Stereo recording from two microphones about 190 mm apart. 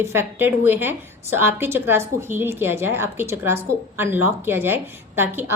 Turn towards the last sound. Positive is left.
turn(degrees=-10)  # may be behind; listen again after turning